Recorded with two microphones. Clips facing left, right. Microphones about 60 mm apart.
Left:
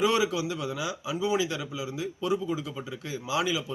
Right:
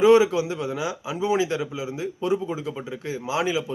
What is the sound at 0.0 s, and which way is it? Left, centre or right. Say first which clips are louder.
A man's voice: right 9 dB; right.